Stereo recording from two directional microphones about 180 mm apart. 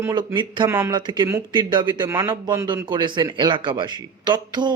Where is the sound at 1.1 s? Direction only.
25° right (ahead or behind).